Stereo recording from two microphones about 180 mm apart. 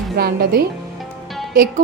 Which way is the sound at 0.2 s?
60° right (ahead or behind).